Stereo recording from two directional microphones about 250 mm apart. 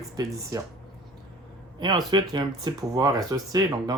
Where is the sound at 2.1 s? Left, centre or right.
Centre.